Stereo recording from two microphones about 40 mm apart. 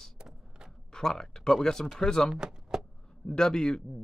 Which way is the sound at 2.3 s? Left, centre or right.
Centre.